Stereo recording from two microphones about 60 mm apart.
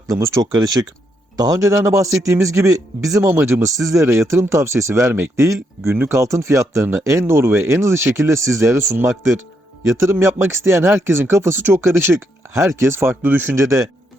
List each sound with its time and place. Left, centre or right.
0.1 s a man's voice: right
0.5 s a man's voice: right
3.3 s speech: right
3.6 s a man's voice: right
4.0 s speech: right
6.1 s a man's voice: right
13.2 s speech: right
13.6 s speech: right